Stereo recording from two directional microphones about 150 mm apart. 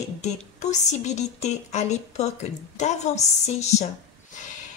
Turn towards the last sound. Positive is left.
turn(degrees=50)  # may be behind; listen again after turning